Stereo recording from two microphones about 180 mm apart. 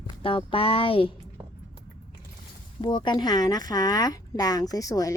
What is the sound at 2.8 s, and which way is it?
Speech, 25° left (ahead or behind).